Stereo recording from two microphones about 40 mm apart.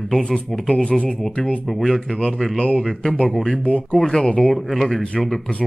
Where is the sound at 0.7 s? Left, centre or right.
Left.